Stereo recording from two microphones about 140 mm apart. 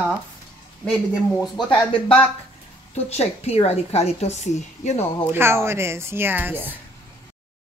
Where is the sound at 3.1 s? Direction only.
50° left (ahead or behind).